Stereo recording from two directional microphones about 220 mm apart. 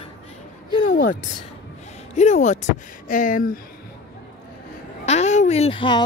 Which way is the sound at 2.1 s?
30° left (ahead or behind).